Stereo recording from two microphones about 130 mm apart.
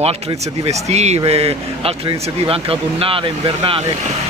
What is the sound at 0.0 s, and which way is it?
Speech, 50° right (ahead or behind).